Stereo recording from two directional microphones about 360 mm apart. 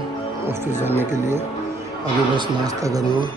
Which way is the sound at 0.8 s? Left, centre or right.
Centre.